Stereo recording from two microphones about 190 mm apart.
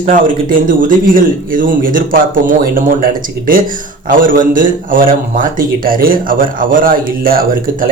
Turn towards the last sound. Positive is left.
turn(degrees=-50)  # may be behind; listen again after turning